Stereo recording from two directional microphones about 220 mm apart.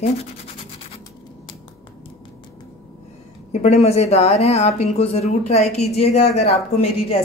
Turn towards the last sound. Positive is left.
turn(degrees=30)  # may be behind; listen again after turning